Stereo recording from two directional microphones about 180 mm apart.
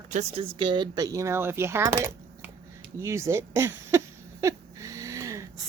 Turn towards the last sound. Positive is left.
turn(degrees=-15)  # may be behind; listen again after turning